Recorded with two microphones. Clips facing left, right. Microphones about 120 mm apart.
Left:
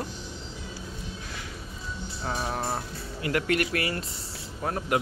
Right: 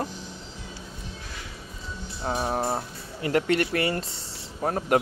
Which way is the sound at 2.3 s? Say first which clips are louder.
Right 4 dB; 30° right (ahead or behind).